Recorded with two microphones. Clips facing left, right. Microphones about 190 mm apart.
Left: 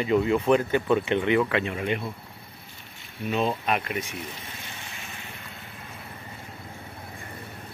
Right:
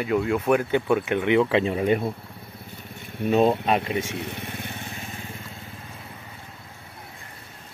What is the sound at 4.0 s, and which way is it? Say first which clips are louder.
Vehicle: right 5 dB; 75° right (ahead or behind).